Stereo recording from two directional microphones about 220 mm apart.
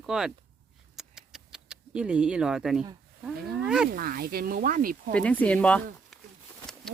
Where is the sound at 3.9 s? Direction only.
40° right (ahead or behind).